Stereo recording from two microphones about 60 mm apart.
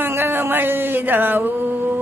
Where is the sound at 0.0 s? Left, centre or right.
Right.